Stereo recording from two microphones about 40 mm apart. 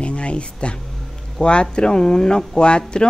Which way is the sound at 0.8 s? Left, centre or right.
Centre.